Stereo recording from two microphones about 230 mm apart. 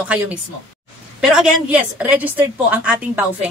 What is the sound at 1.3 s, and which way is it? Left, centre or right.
A woman's voice, centre.